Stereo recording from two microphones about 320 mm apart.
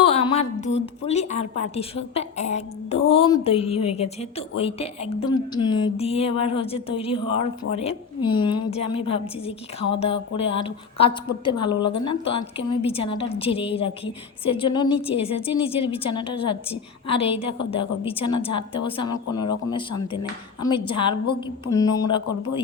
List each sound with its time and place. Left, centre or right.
0.0 s a woman's voice: centre